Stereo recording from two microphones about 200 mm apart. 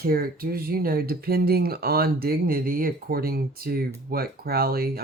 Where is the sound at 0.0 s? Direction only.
45° right (ahead or behind).